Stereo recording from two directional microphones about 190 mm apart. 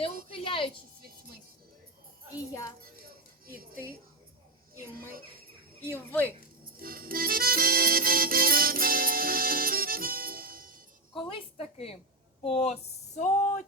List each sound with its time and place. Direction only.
0.3 s a sound: 30° left (ahead or behind)
1.0 s music: 50° right (ahead or behind)
2.5 s speech: 15° left (ahead or behind)
3.4 s music: 50° right (ahead or behind)
6.1 s speech: 10° left (ahead or behind)
6.7 s music: 50° right (ahead or behind)
11.3 s a sound: 30° left (ahead or behind)
12.4 s speech: 30° left (ahead or behind)